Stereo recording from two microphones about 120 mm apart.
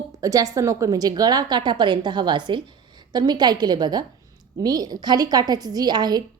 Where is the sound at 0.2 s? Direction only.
30° right (ahead or behind).